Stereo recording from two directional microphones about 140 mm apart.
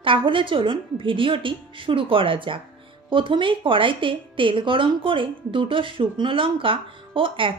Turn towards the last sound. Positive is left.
turn(degrees=-40)  # may be behind; listen again after turning